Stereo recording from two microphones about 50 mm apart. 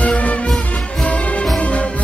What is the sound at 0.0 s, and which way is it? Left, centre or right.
Music, left.